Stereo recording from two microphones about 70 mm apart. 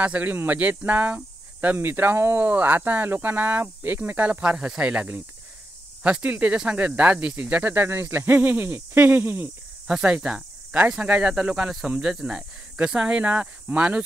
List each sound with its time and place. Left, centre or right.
0.0 s speech: right
4.4 s speech: centre; by 9.5 s right
9.8 s speech: centre